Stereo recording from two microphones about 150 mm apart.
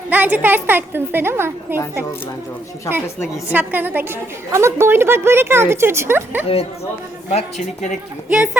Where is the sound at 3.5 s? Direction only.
10° right (ahead or behind).